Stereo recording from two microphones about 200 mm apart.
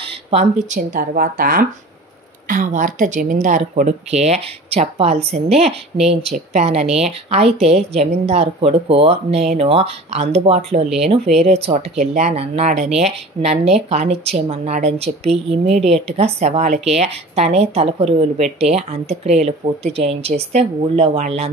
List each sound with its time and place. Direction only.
0.3 s a woman's voice: 35° right (ahead or behind)